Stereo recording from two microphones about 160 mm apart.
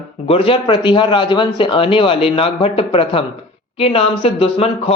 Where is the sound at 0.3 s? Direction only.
35° left (ahead or behind).